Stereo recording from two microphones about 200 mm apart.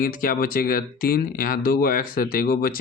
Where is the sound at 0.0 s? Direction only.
45° left (ahead or behind).